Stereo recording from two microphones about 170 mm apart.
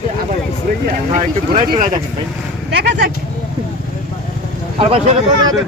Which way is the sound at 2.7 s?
75° right (ahead or behind).